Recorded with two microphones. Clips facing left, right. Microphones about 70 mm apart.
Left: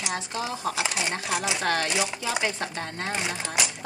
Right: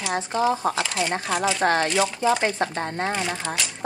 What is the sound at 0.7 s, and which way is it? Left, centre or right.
Speech, centre.